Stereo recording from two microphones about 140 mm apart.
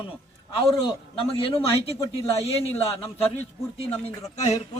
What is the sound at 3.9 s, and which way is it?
Speech, 50° left (ahead or behind).